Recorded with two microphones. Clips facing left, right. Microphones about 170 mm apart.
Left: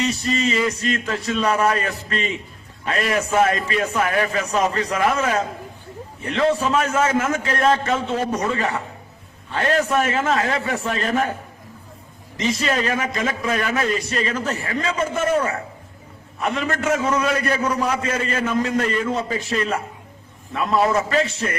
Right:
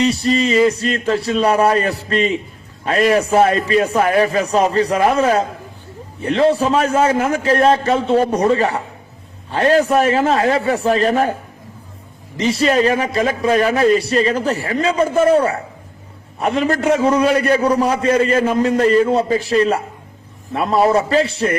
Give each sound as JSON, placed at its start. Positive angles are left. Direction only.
{"t": 0.0, "sound": "a man's voice", "side_deg": -35}
{"t": 12.4, "sound": "a man's voice", "side_deg": -35}